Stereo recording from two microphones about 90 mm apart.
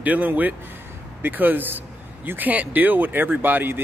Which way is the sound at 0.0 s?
20° right (ahead or behind).